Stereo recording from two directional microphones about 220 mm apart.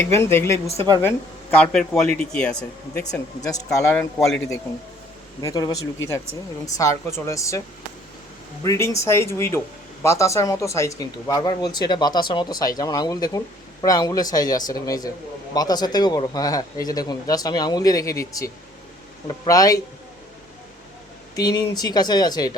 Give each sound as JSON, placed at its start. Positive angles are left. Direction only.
{"t": 0.2, "sound": "speech", "side_deg": 10}
{"t": 3.1, "sound": "speech", "side_deg": 15}
{"t": 3.7, "sound": "speech", "side_deg": 0}
{"t": 5.4, "sound": "speech", "side_deg": 15}
{"t": 8.6, "sound": "speech", "side_deg": 15}
{"t": 21.3, "sound": "speech", "side_deg": 15}